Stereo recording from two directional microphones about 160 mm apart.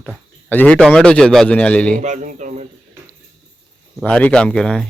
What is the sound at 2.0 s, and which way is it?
Speech, 50° right (ahead or behind).